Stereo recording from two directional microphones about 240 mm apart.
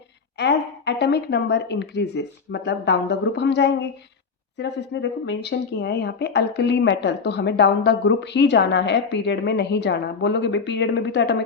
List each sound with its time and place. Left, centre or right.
0.3 s speech: left